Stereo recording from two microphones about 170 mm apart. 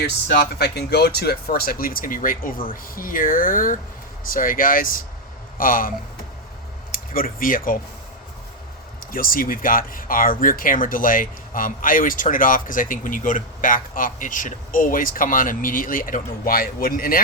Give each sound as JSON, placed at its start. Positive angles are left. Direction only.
{"t": 0.3, "sound": "speech", "side_deg": 65}
{"t": 6.9, "sound": "speech", "side_deg": 55}
{"t": 9.1, "sound": "speech", "side_deg": 55}